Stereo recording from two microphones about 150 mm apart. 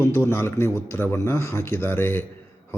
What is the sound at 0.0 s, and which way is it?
A man's voice, 15° left (ahead or behind).